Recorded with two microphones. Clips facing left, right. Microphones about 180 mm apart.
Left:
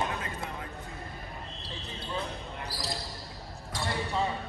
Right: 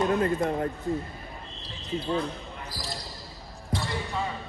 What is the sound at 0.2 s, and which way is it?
Speech, 55° right (ahead or behind).